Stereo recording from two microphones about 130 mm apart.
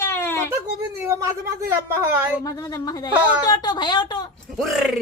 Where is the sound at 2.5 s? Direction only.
25° left (ahead or behind).